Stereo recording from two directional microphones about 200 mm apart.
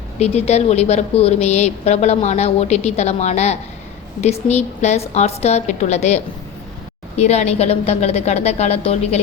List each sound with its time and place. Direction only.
0.2 s a woman's voice: 30° left (ahead or behind)